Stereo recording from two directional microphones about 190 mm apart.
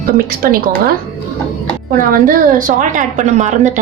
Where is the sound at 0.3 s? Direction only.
50° right (ahead or behind).